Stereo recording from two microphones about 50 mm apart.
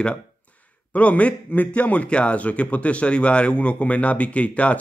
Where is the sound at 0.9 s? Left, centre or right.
Left.